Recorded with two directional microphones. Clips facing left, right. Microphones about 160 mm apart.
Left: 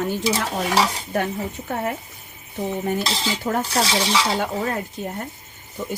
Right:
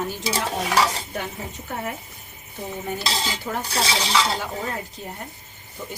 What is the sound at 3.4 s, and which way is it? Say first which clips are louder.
Speech: left 6 dB; 50° left (ahead or behind).